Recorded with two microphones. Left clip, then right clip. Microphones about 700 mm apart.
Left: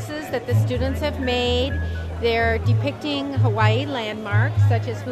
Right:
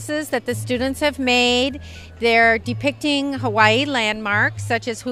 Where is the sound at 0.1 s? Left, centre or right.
Right.